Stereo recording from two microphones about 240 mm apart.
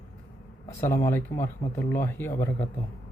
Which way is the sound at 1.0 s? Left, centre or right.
Centre.